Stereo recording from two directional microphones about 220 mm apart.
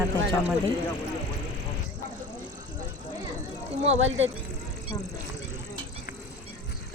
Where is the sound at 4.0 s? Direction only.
60° right (ahead or behind).